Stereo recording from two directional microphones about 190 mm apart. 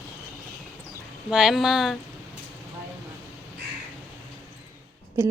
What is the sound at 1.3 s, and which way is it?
Speech, centre (ahead or behind).